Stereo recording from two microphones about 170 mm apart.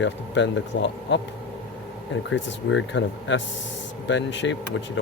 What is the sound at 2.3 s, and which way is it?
Speech, 90° left.